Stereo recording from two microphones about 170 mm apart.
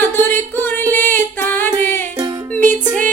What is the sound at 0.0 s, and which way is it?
Music, 10° left (ahead or behind).